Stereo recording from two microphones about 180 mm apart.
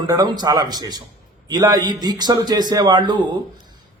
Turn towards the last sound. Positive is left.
turn(degrees=-25)  # may be behind; listen again after turning